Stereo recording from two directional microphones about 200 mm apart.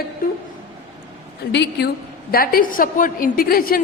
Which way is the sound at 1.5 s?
55° left (ahead or behind).